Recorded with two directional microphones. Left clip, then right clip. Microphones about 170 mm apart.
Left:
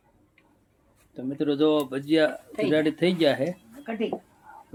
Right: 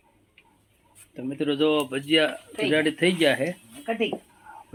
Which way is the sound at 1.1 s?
Centre (ahead or behind).